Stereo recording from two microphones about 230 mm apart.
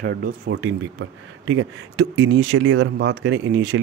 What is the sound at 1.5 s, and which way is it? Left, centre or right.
Speech, right.